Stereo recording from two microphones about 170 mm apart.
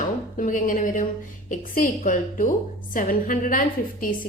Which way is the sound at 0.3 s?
50° left (ahead or behind).